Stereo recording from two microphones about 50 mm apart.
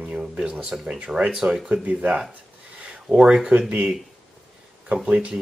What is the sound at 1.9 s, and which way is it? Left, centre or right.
Speech, right.